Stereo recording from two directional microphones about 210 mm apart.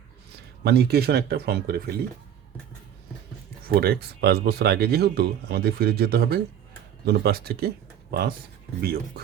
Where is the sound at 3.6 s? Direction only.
45° right (ahead or behind).